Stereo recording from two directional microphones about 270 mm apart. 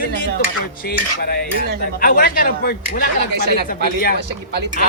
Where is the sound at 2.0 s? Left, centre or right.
Left.